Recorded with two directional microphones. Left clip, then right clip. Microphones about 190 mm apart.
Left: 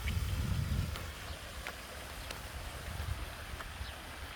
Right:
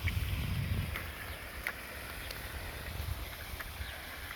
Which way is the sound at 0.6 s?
Centre (ahead or behind).